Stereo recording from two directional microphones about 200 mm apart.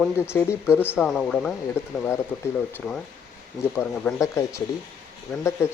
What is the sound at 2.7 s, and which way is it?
Speech, 5° left (ahead or behind).